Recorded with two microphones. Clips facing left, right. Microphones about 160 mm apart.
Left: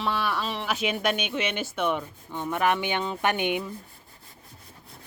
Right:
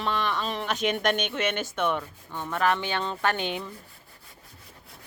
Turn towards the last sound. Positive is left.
turn(degrees=15)  # may be behind; listen again after turning